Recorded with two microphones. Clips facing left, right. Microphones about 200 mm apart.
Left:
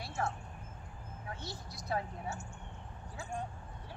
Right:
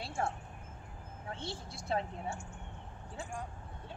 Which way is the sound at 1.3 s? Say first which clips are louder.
Right 4 dB; 25° right (ahead or behind).